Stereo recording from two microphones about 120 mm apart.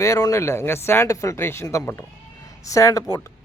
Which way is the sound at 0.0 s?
25° left (ahead or behind).